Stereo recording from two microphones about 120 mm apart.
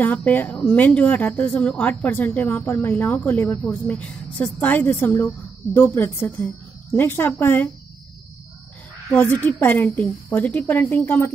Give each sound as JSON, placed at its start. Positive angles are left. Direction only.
{"t": 0.0, "sound": "speech", "side_deg": 10}
{"t": 9.1, "sound": "speech", "side_deg": 15}